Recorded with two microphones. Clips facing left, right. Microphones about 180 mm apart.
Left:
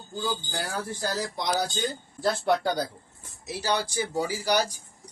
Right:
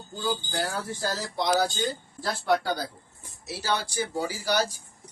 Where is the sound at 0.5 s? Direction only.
15° left (ahead or behind).